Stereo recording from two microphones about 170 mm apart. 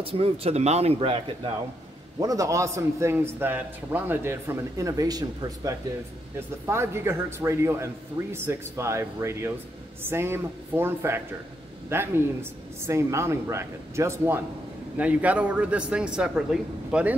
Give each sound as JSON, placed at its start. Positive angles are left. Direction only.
{"t": 0.0, "sound": "speech", "side_deg": -35}
{"t": 2.1, "sound": "a man's voice", "side_deg": -20}